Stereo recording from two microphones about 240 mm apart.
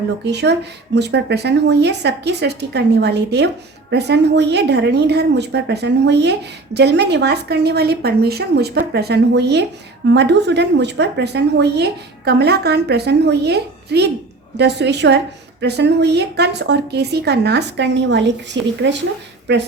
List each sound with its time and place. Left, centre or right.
0.3 s a woman's voice: right